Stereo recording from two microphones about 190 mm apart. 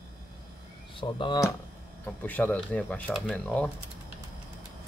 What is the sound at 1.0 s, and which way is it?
Speech, 25° left (ahead or behind).